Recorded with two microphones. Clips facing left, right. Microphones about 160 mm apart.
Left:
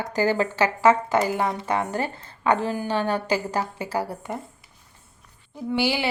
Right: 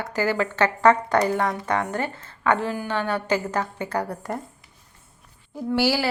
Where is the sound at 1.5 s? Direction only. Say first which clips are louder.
Even; 25° left (ahead or behind).